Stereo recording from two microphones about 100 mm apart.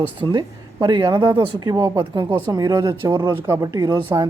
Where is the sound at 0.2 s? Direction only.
50° right (ahead or behind).